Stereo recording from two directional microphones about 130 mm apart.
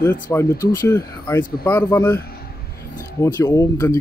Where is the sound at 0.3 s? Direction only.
20° left (ahead or behind).